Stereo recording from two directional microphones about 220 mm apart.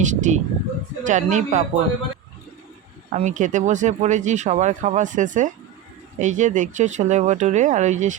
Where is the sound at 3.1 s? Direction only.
35° right (ahead or behind).